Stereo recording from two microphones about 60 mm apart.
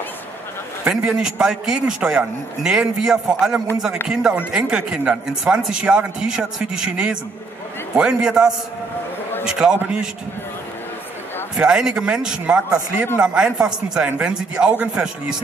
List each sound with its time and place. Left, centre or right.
0.8 s a man's voice: centre
11.5 s a man's voice: centre